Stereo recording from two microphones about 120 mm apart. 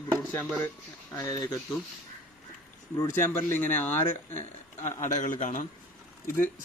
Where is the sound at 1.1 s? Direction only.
30° left (ahead or behind).